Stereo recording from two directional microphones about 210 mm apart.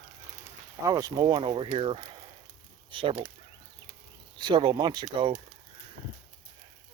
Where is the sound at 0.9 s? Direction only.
15° right (ahead or behind).